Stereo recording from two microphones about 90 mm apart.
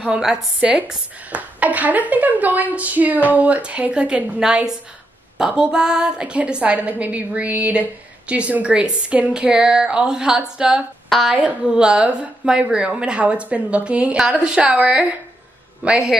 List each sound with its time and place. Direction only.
0.1 s a woman's voice: 10° right (ahead or behind)